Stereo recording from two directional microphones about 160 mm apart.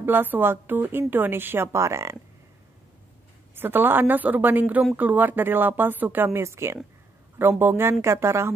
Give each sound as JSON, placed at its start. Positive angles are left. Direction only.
{"t": 0.0, "sound": "a woman's voice", "side_deg": -10}
{"t": 3.5, "sound": "a woman's voice", "side_deg": -15}